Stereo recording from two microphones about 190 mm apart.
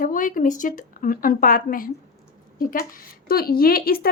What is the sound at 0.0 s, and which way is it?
A woman's voice, 45° left (ahead or behind).